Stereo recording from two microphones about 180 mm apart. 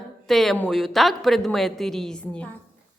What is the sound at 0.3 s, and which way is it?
A woman's voice, centre (ahead or behind).